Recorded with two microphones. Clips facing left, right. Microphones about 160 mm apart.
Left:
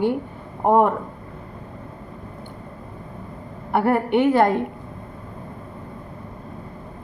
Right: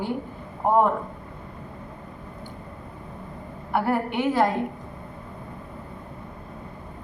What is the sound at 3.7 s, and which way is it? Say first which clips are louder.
Speech: left 5 dB; 60° left (ahead or behind).